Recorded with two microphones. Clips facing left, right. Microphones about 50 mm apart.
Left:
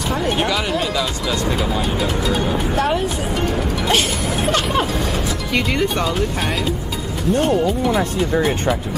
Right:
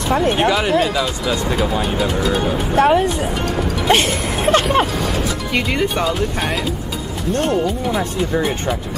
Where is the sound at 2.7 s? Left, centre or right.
Right.